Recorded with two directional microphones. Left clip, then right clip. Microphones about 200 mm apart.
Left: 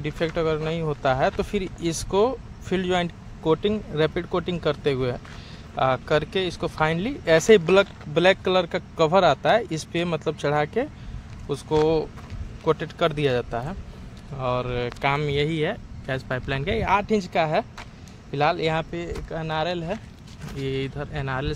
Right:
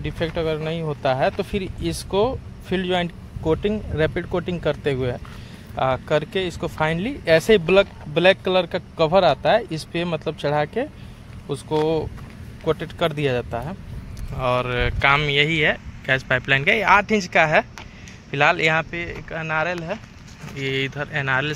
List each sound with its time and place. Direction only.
0.0 s speech: 5° right (ahead or behind)
18.8 s speech: 25° left (ahead or behind)
20.5 s speech: 10° left (ahead or behind)